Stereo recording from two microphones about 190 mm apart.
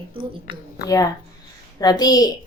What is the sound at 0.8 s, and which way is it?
A woman's voice, 20° left (ahead or behind).